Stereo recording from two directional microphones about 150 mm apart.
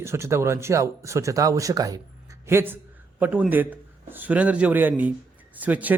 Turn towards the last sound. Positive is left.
turn(degrees=-10)  # may be behind; listen again after turning